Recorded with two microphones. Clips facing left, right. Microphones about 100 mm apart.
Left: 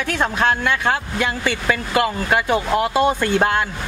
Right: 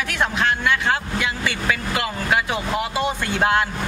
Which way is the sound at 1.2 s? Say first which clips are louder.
Left 6 dB; 45° left (ahead or behind).